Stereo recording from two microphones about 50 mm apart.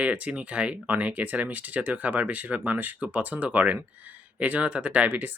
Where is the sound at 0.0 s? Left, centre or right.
Right.